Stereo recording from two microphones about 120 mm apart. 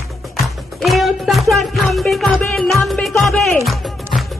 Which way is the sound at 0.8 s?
Centre (ahead or behind).